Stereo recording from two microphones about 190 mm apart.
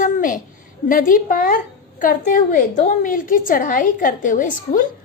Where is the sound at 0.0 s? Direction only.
45° left (ahead or behind).